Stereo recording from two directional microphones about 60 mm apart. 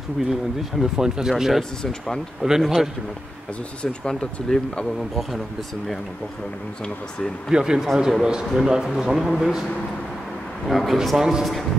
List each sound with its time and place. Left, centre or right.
0.2 s speech: centre
1.6 s speech: centre
2.6 s a man's voice: centre
3.8 s speech: centre
7.5 s speech: centre
10.7 s a man's voice: centre